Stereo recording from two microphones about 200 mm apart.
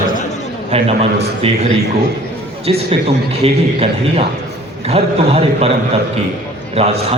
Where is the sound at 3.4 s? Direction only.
30° right (ahead or behind).